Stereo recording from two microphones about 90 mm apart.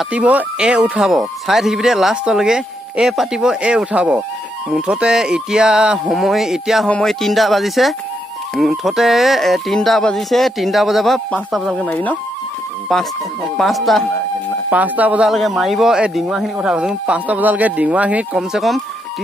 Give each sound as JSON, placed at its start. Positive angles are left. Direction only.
{"t": 0.1, "sound": "speech", "side_deg": -15}
{"t": 11.8, "sound": "speech", "side_deg": 15}
{"t": 12.9, "sound": "speech", "side_deg": 5}
{"t": 14.7, "sound": "speech", "side_deg": -15}
{"t": 15.2, "sound": "speech", "side_deg": 0}
{"t": 18.5, "sound": "speech", "side_deg": 0}